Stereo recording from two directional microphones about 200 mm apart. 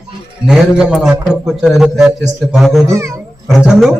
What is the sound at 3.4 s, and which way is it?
Speech, centre (ahead or behind).